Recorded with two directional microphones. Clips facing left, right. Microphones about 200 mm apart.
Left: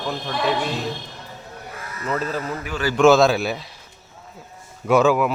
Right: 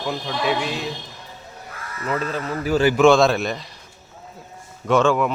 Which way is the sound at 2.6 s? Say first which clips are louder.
Right 9 dB; 35° right (ahead or behind).